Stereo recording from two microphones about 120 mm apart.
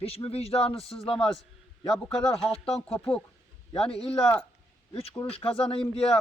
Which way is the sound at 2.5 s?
55° left (ahead or behind).